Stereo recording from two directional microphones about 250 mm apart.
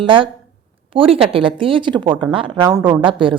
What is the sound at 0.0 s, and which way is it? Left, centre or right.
A woman's voice, centre.